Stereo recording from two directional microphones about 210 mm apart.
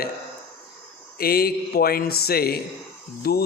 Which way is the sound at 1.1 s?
45° left (ahead or behind).